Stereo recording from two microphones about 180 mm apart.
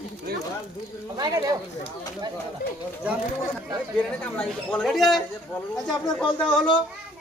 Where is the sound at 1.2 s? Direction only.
20° right (ahead or behind).